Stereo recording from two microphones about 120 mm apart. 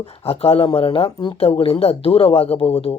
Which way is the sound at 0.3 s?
50° left (ahead or behind).